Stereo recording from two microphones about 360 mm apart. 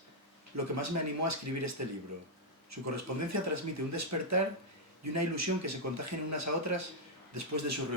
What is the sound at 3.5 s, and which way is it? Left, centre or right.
Speech, right.